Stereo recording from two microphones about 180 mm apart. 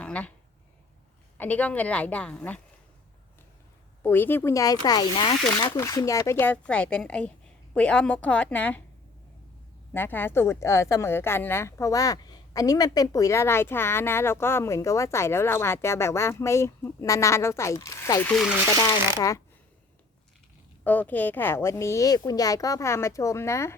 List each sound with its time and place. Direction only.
0.0 s speech: 5° left (ahead or behind)
1.4 s speech: 10° left (ahead or behind)
4.0 s speech: 10° left (ahead or behind)
9.9 s speech: 10° left (ahead or behind)
20.8 s speech: 10° left (ahead or behind)